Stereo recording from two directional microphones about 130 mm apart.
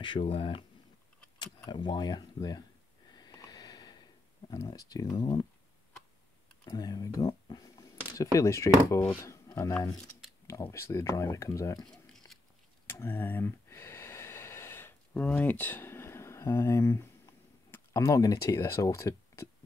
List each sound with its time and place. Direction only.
0.0 s speech: 40° left (ahead or behind)
1.7 s speech: 35° left (ahead or behind)
3.1 s sniff: 30° left (ahead or behind)
6.7 s speech: 30° left (ahead or behind)
12.8 s a sound: 15° left (ahead or behind)